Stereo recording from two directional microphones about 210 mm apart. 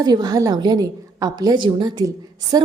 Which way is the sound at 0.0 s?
20° right (ahead or behind).